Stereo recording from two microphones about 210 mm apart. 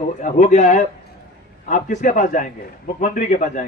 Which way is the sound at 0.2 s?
35° left (ahead or behind).